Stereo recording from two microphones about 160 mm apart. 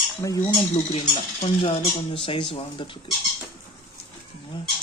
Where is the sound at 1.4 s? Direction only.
35° left (ahead or behind).